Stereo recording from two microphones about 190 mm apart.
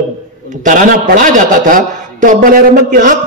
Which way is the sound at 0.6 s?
45° right (ahead or behind).